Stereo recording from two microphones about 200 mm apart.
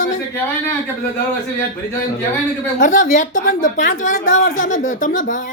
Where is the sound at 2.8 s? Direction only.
40° left (ahead or behind).